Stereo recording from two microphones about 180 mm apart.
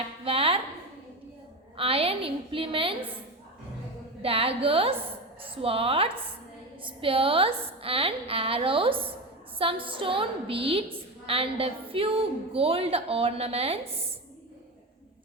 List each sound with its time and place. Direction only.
0.3 s a sound: 30° right (ahead or behind)
1.7 s a woman's voice: 30° right (ahead or behind)
4.2 s a woman's voice: 30° right (ahead or behind)